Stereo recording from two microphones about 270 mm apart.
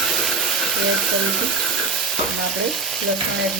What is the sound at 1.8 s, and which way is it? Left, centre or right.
Frying, centre.